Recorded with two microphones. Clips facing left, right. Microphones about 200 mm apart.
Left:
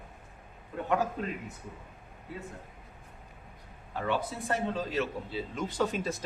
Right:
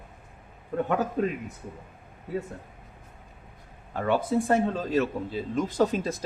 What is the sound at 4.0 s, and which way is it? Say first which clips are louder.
A man's voice: right 7 dB; 50° right (ahead or behind).